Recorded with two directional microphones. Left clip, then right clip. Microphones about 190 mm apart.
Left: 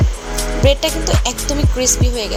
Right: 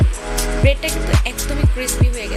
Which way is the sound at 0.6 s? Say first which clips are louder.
Left 6 dB; 30° left (ahead or behind).